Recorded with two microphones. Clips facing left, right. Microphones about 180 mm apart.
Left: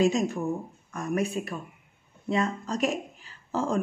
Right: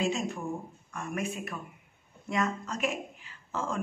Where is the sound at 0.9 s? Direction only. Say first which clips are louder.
Left 6 dB; 40° left (ahead or behind).